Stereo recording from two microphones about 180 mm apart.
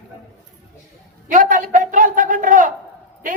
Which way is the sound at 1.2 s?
50° right (ahead or behind).